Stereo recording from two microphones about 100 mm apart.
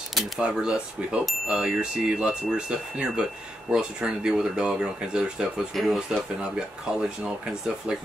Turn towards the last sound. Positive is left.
turn(degrees=-10)  # may be behind; listen again after turning